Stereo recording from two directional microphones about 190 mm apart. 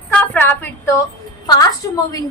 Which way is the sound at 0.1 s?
10° left (ahead or behind).